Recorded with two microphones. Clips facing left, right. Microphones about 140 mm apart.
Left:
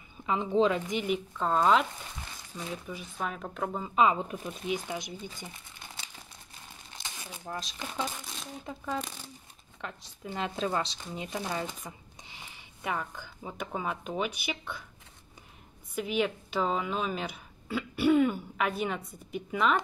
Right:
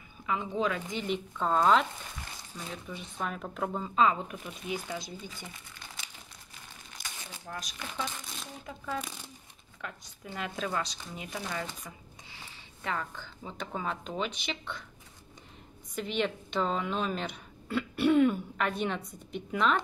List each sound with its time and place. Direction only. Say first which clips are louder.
0.3 s speech: left 5 dB; 25° left (ahead or behind)
1.0 s a woman's voice: left 1 dB; 5° left (ahead or behind)
3.9 s speech: left 2 dB; 15° left (ahead or behind)
6.9 s crumpling: left 2 dB; 25° left (ahead or behind)
9.8 s speech: left 2 dB; 25° left (ahead or behind); by 14.9 s 10° left (ahead or behind)
15.9 s a woman's voice: left 2 dB; 5° left (ahead or behind)